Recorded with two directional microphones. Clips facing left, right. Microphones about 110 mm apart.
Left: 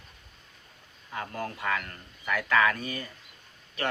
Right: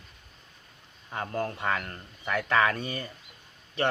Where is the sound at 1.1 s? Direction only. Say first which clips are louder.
Right 3 dB; 30° right (ahead or behind).